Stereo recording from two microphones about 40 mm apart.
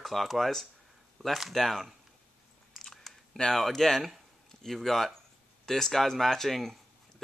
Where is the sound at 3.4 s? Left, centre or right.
Centre.